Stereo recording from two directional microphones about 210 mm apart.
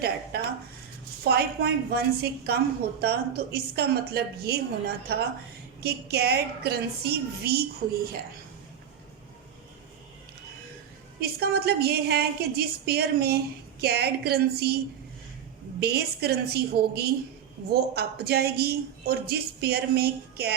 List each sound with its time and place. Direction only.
1.2 s a woman's voice: 50° right (ahead or behind)
11.2 s a woman's voice: 50° right (ahead or behind)
15.8 s a woman's voice: 50° right (ahead or behind)